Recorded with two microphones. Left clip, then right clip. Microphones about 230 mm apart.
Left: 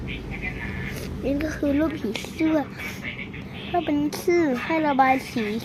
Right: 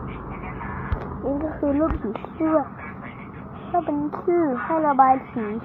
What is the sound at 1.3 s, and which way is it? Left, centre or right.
Speech, centre.